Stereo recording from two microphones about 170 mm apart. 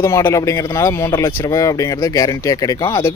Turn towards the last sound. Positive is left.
turn(degrees=20)  # may be behind; listen again after turning